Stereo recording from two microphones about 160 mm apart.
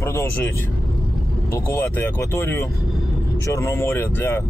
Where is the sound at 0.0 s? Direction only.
15° left (ahead or behind).